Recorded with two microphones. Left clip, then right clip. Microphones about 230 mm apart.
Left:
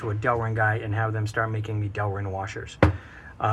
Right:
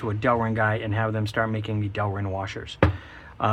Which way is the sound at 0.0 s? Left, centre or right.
Right.